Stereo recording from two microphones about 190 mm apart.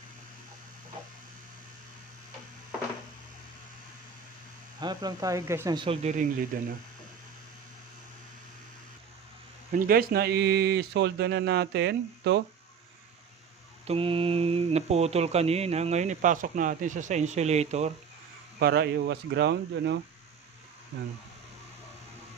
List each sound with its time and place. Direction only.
4.8 s speech: 20° right (ahead or behind); by 6.7 s 45° right (ahead or behind)
9.7 s speech: 50° right (ahead or behind)
13.8 s speech: 30° right (ahead or behind)
18.6 s speech: 55° right (ahead or behind)